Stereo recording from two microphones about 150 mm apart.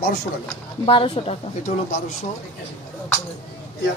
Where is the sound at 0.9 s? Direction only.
40° left (ahead or behind).